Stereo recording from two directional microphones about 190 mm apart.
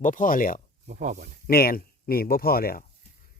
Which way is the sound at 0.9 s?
40° right (ahead or behind).